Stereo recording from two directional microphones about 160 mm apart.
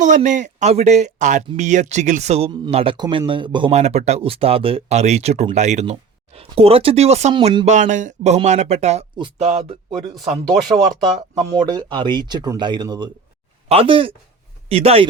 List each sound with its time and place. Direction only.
0.0 s speech: 50° right (ahead or behind); by 3.7 s 30° right (ahead or behind)
3.7 s speech: 45° right (ahead or behind)
11.5 s speech: 25° right (ahead or behind)